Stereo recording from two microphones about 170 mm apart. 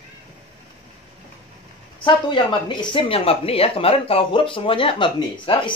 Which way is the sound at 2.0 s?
30° left (ahead or behind).